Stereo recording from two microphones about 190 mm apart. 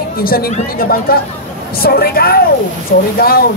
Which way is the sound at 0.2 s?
50° left (ahead or behind).